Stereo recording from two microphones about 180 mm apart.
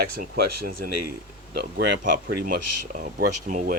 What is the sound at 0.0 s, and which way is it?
Speech, 55° right (ahead or behind).